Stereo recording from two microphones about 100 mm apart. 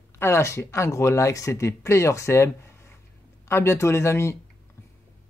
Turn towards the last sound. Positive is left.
turn(degrees=25)  # may be behind; listen again after turning